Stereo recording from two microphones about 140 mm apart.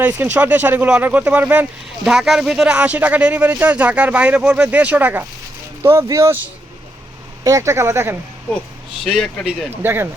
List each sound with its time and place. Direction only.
0.0 s speech: 10° right (ahead or behind)
9.0 s a man's voice: centre (ahead or behind)
9.6 s speech: 15° right (ahead or behind)